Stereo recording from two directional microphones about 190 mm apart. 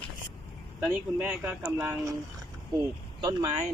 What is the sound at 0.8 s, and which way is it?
Speech, 10° right (ahead or behind).